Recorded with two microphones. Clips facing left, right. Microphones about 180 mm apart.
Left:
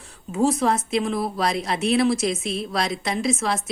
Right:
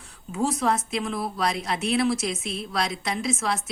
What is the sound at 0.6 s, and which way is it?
A woman's voice, centre (ahead or behind).